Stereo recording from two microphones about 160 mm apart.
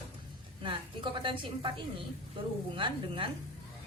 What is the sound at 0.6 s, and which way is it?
A woman's voice, 30° right (ahead or behind).